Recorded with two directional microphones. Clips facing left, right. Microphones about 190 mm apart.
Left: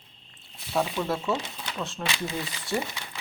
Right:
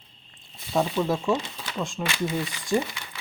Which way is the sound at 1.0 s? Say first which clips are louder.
Right 4 dB; 15° right (ahead or behind).